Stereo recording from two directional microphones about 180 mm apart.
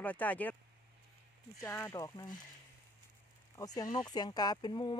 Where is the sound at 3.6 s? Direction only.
20° left (ahead or behind).